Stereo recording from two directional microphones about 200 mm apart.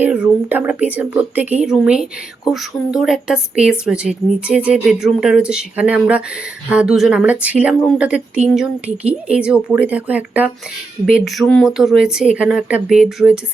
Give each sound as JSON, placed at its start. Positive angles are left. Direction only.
{"t": 0.0, "sound": "speech", "side_deg": -5}